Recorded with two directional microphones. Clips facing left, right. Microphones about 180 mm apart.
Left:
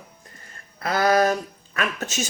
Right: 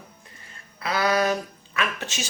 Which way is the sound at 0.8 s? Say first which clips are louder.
Left 4 dB; 45° left (ahead or behind).